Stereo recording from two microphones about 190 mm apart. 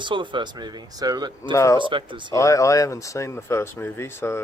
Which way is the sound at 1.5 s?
15° left (ahead or behind).